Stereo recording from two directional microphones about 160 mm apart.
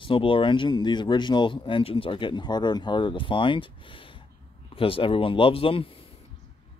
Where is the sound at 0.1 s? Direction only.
35° left (ahead or behind).